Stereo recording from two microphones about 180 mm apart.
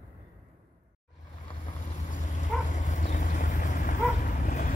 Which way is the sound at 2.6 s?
45° left (ahead or behind).